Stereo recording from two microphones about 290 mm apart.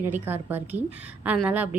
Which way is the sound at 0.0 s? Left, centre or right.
Centre.